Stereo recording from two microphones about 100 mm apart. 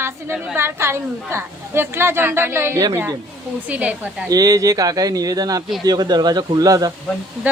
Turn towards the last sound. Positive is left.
turn(degrees=-15)  # may be behind; listen again after turning